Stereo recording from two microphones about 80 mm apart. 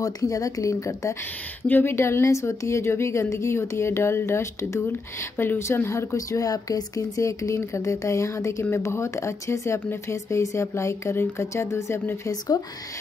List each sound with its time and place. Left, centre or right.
0.0 s speech: left
1.7 s speech: left